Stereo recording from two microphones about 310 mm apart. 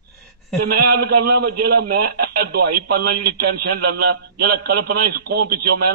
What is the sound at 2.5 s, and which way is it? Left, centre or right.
Speech, right.